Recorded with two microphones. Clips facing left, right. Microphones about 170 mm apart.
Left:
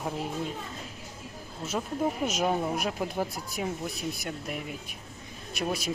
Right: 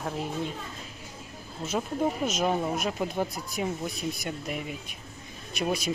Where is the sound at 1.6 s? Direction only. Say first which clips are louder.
Right 2 dB; centre (ahead or behind).